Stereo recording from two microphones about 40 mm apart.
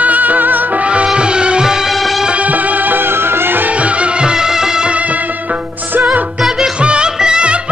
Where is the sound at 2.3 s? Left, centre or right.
Right.